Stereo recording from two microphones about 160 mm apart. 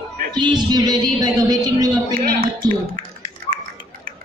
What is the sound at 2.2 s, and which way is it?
Speech, 65° right (ahead or behind).